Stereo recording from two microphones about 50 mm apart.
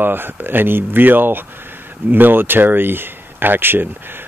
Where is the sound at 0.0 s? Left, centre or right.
Right.